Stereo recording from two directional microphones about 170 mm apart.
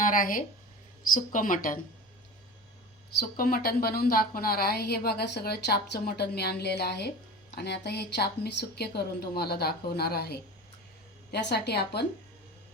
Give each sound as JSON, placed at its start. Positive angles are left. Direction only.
{"t": 0.0, "sound": "a woman's voice", "side_deg": 55}
{"t": 3.2, "sound": "a woman's voice", "side_deg": 60}
{"t": 11.3, "sound": "a woman's voice", "side_deg": 80}